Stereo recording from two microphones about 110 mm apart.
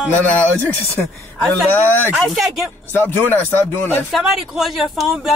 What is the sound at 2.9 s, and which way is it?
Speech, 20° left (ahead or behind).